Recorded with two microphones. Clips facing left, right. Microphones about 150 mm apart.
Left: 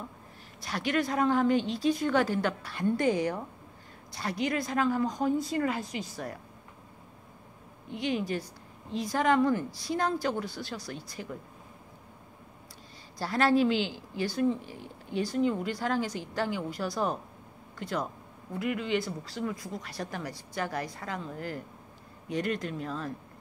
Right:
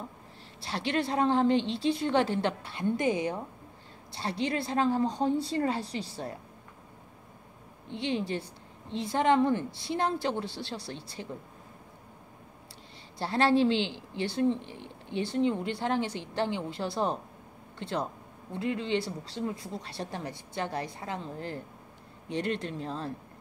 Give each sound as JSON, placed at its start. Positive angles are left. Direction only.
{"t": 0.6, "sound": "speech", "side_deg": -30}
{"t": 7.9, "sound": "speech", "side_deg": -25}
{"t": 13.2, "sound": "speech", "side_deg": -30}